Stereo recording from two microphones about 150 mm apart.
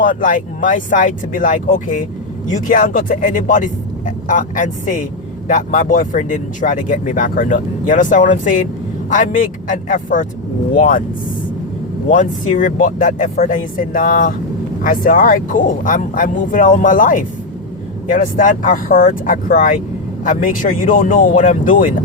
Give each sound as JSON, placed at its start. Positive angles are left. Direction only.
{"t": 0.0, "sound": "speech", "side_deg": 60}
{"t": 12.0, "sound": "speech", "side_deg": 60}